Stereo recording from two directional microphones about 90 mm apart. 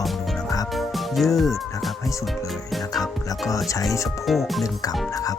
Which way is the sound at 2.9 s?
40° left (ahead or behind).